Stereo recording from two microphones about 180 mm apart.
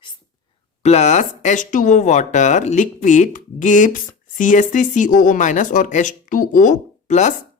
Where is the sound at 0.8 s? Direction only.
40° left (ahead or behind).